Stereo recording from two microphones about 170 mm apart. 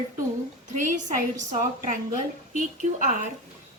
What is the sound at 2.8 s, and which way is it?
Speech, 45° right (ahead or behind).